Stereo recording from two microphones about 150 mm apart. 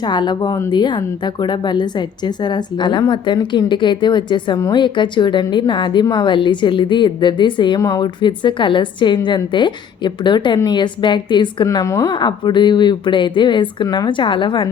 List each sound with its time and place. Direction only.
0.0 s a woman's voice: 30° left (ahead or behind)